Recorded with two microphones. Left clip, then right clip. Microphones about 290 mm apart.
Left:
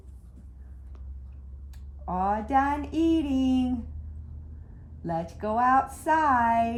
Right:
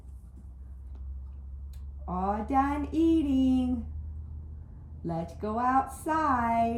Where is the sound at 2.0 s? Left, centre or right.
Centre.